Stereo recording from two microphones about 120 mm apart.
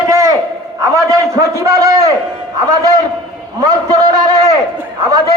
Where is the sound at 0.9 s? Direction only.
30° right (ahead or behind).